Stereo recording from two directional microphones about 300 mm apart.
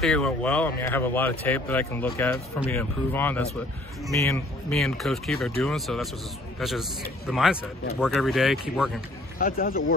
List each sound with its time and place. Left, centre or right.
0.0 s speech: centre
9.4 s speech: left